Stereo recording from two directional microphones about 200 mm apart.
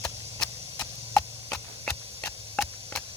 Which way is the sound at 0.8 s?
15° left (ahead or behind).